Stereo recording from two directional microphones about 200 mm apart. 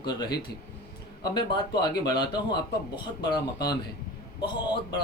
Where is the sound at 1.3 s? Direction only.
20° left (ahead or behind).